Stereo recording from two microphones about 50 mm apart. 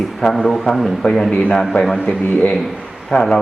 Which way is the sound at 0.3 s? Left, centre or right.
Centre.